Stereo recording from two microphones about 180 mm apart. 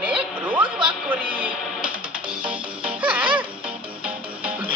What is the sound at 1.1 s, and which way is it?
Music, 10° right (ahead or behind).